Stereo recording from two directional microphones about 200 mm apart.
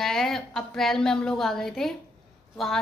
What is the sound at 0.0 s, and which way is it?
A woman's voice, centre (ahead or behind).